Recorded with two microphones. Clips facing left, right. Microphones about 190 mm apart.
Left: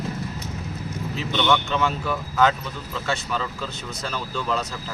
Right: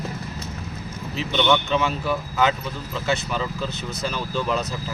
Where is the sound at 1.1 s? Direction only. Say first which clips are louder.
Right 2 dB; 5° right (ahead or behind).